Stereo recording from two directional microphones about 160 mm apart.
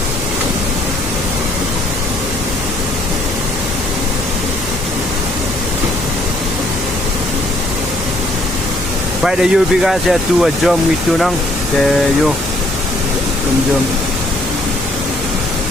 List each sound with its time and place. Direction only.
9.2 s speech: centre (ahead or behind)